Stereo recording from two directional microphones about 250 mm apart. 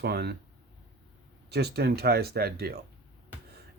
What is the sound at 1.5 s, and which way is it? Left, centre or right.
Speech, right.